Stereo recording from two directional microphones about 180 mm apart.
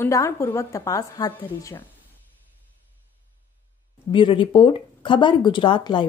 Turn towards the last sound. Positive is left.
turn(degrees=25)  # may be behind; listen again after turning